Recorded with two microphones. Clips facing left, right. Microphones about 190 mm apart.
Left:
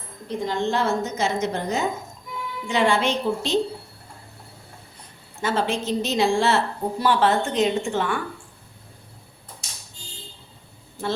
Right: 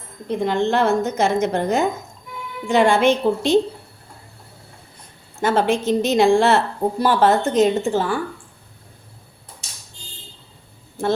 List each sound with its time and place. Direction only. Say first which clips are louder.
0.3 s a woman's voice: right 5 dB; 65° right (ahead or behind)
5.4 s a woman's voice: right 6 dB; 55° right (ahead or behind)
7.0 s a woman's voice: right 3 dB; 45° right (ahead or behind)